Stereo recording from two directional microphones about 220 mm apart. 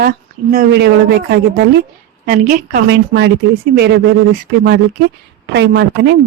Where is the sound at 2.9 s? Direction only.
55° right (ahead or behind).